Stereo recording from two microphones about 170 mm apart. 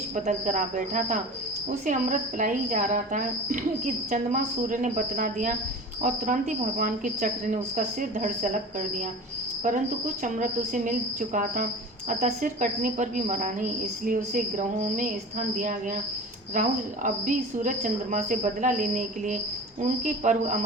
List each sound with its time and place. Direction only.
0.3 s a woman's voice: 45° right (ahead or behind)
10.2 s a woman's voice: 50° right (ahead or behind)
16.6 s a woman's voice: 50° right (ahead or behind)